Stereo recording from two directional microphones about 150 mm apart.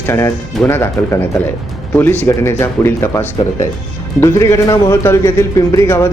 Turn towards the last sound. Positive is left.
turn(degrees=20)  # may be behind; listen again after turning